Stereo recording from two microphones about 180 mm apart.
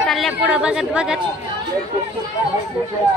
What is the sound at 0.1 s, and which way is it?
Speech, centre (ahead or behind).